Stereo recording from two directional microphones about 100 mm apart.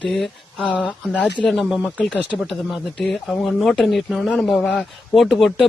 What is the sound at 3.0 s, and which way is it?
Speech, 5° left (ahead or behind).